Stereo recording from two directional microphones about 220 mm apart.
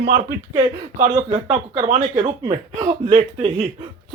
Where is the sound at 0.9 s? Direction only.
25° right (ahead or behind).